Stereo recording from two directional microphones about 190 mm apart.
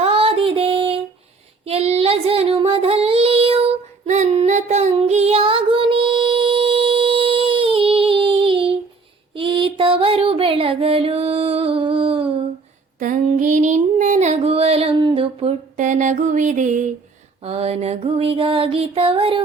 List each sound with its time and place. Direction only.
0.0 s child singing: 30° right (ahead or behind)
4.0 s female singing: 40° right (ahead or behind)
9.3 s music: 25° right (ahead or behind)
13.0 s female singing: 40° right (ahead or behind)
17.4 s music: 30° right (ahead or behind)